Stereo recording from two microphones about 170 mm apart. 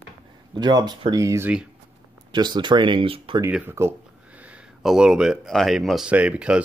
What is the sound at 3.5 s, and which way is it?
Speech, 10° right (ahead or behind).